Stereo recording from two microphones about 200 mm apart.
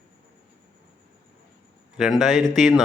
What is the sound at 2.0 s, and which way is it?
Speech, centre (ahead or behind).